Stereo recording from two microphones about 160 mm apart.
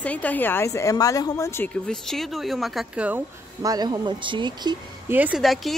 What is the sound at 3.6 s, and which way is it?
Speech, 25° right (ahead or behind).